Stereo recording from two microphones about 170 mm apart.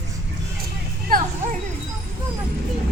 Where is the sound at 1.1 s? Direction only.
55° right (ahead or behind).